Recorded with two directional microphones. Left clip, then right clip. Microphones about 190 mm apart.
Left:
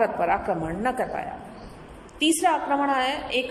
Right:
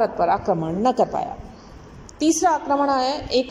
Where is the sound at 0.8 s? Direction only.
35° right (ahead or behind).